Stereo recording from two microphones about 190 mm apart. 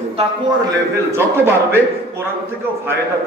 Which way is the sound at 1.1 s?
15° right (ahead or behind).